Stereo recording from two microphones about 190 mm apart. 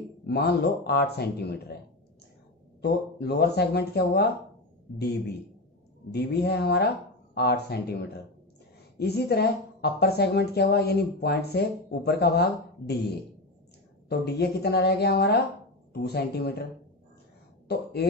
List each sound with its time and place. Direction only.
0.3 s speech: 60° left (ahead or behind)
2.8 s speech: 60° left (ahead or behind)
6.1 s speech: 60° left (ahead or behind)
17.7 s speech: 60° left (ahead or behind)